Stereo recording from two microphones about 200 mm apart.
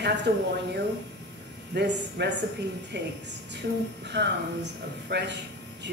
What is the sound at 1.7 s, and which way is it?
Speech, 60° right (ahead or behind).